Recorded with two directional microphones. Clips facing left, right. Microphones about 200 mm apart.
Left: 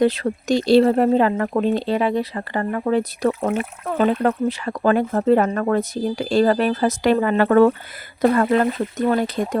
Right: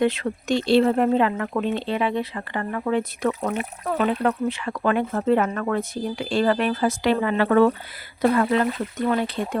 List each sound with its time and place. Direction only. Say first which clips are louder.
0.0 s speech: left 4 dB; 35° left (ahead or behind)